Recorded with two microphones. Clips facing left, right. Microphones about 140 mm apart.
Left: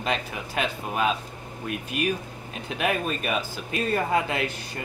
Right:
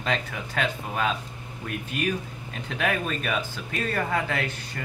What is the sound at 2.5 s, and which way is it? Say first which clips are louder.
Speech: left 1 dB; 15° left (ahead or behind).